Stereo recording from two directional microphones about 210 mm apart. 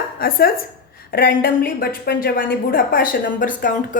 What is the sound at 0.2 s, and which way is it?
A woman's voice, 45° left (ahead or behind).